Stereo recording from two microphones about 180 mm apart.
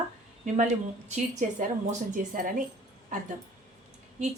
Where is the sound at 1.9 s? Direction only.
45° right (ahead or behind).